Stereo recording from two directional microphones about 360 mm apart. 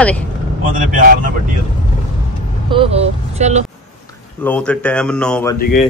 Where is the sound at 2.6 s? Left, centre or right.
Centre.